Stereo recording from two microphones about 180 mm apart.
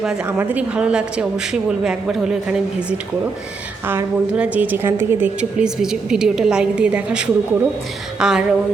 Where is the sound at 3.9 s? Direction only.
10° right (ahead or behind).